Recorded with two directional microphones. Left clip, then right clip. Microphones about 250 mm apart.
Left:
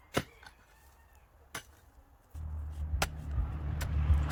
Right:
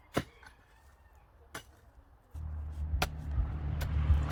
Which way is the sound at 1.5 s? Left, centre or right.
Left.